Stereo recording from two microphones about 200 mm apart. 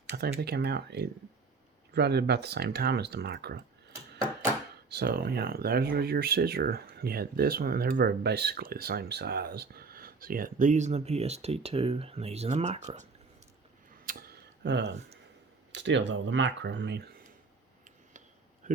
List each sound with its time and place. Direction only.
0.1 s speech: 50° right (ahead or behind)
4.9 s speech: 50° right (ahead or behind); by 13.1 s 35° right (ahead or behind)
14.0 s a sound: 45° right (ahead or behind)
15.7 s speech: 65° right (ahead or behind)